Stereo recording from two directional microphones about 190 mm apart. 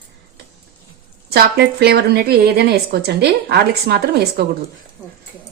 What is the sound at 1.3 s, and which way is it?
A woman's voice, 55° right (ahead or behind).